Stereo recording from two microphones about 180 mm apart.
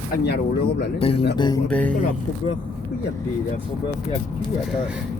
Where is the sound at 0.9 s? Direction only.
30° left (ahead or behind).